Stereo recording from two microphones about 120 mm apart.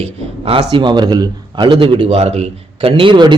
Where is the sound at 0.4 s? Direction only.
45° right (ahead or behind).